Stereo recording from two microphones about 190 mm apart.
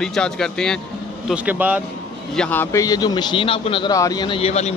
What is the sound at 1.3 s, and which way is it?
Speech, 10° right (ahead or behind).